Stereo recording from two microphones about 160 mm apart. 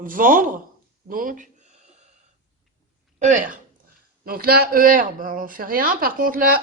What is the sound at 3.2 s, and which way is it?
Speech, 55° right (ahead or behind).